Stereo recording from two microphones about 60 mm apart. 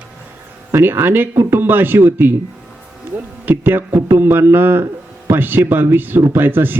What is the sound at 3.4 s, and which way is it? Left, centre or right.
Speech, right.